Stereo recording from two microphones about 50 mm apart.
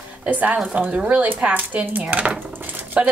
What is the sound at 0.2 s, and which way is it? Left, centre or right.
A woman's voice, right.